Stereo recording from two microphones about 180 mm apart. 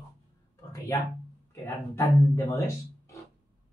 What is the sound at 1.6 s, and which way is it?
Speech, 15° left (ahead or behind).